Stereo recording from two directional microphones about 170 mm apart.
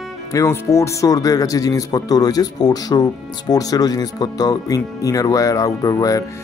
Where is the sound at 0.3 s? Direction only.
20° left (ahead or behind).